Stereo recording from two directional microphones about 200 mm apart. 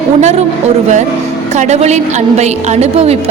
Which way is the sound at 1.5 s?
35° right (ahead or behind).